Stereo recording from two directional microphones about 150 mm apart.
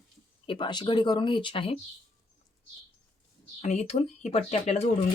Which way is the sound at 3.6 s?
50° left (ahead or behind).